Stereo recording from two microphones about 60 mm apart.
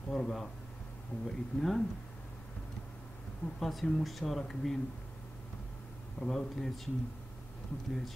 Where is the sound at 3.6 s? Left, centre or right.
Centre.